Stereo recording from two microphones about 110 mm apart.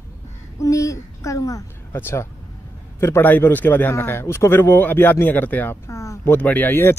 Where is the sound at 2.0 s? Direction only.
20° left (ahead or behind).